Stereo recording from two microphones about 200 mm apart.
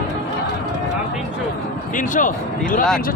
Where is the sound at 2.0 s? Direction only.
40° left (ahead or behind).